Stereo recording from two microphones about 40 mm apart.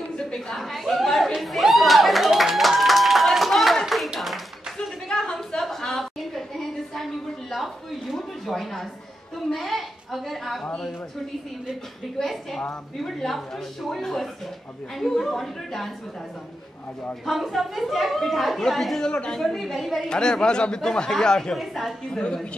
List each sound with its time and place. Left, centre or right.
0.6 s a sound: centre
3.3 s clapping: centre
5.0 s a sound: centre
12.2 s speech: centre
17.6 s speech: centre
19.0 s speech: left
19.3 s speech: centre
20.0 s speech: left
21.5 s speech: centre
22.1 s speech: left